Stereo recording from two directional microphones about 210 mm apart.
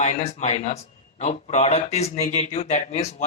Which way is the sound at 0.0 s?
30° left (ahead or behind).